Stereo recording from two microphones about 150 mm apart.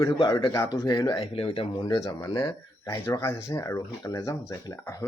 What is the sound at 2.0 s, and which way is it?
Speech, 25° left (ahead or behind).